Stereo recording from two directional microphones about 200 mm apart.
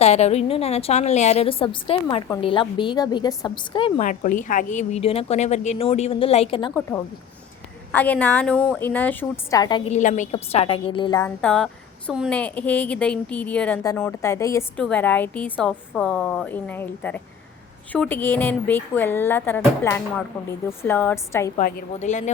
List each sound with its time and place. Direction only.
0.0 s a woman's voice: 30° left (ahead or behind)
4.0 s a woman's voice: 40° left (ahead or behind)
7.9 s a woman's voice: 10° left (ahead or behind)
9.9 s a woman's voice: 40° left (ahead or behind)
11.2 s a woman's voice: 5° left (ahead or behind)
21.6 s a woman's voice: 40° left (ahead or behind)